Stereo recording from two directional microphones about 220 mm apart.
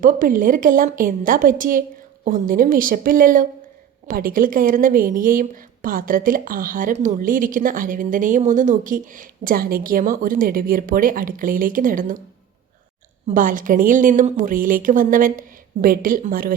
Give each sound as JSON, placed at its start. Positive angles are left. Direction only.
{"t": 0.0, "sound": "a woman's voice", "side_deg": -35}
{"t": 13.2, "sound": "a woman's voice", "side_deg": -40}